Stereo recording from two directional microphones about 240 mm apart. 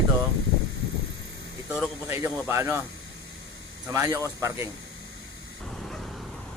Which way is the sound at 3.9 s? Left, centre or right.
Centre.